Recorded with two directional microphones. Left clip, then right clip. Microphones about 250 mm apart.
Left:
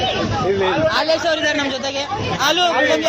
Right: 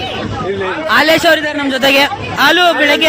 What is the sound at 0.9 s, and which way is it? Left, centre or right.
Speech, right.